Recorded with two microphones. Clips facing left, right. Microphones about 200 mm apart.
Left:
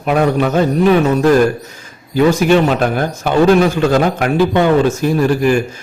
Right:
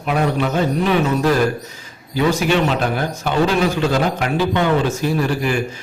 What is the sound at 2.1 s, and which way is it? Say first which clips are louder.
A man's voice: left 6 dB; 45° left (ahead or behind).